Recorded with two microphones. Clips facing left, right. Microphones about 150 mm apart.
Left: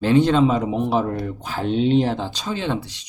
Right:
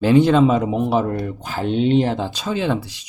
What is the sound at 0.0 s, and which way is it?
Speech, 10° right (ahead or behind).